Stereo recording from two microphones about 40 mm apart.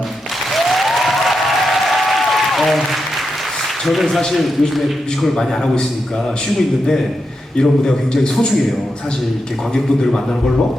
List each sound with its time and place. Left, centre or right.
0.5 s applause: centre
4.3 s a man's voice: centre
7.5 s a man's voice: centre
9.7 s a man's voice: centre